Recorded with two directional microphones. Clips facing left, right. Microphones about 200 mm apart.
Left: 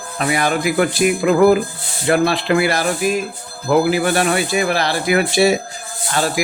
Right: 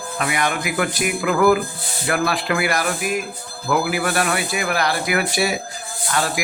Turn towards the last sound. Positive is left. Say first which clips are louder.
# left 3 dB
turn(degrees=30)  # may be behind; listen again after turning